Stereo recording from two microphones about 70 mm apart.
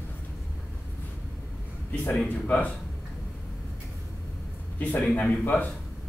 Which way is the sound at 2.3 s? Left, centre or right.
Left.